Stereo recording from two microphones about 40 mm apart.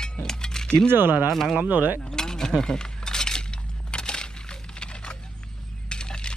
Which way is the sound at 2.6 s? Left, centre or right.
Centre.